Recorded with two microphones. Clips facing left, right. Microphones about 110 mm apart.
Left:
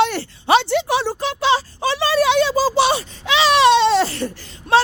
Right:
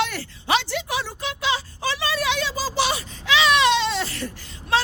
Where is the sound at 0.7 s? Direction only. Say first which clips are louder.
Left 9 dB; 30° left (ahead or behind).